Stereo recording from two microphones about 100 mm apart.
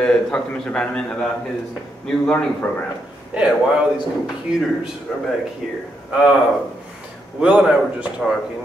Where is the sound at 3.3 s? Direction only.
10° right (ahead or behind).